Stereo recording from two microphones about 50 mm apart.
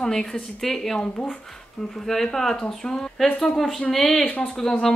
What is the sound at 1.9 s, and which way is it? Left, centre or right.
Speech, centre.